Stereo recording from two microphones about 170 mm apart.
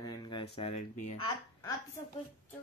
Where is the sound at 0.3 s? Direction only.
35° left (ahead or behind).